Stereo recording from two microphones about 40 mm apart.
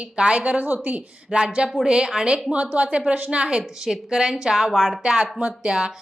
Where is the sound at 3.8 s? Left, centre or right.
Centre.